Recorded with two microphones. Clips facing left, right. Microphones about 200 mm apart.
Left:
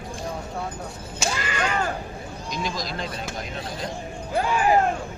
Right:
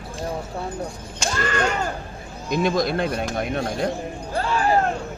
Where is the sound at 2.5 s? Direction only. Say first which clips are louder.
Right 10 dB; 55° right (ahead or behind).